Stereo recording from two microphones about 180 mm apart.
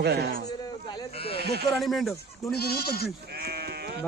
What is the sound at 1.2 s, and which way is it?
Speech, 30° left (ahead or behind).